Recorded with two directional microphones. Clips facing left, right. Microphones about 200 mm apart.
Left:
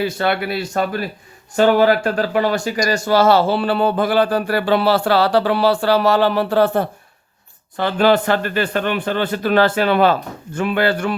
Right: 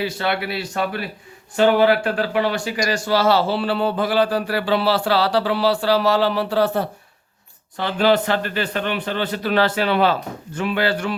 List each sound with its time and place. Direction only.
0.0 s speech: 50° left (ahead or behind)